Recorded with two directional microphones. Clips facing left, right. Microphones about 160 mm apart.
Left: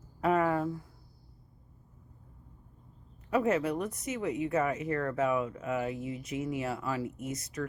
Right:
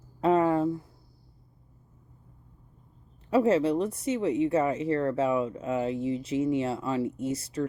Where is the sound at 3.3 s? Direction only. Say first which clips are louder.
Right 5 dB; 30° right (ahead or behind).